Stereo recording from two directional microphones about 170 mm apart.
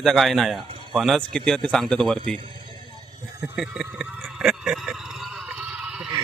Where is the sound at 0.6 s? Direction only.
30° right (ahead or behind).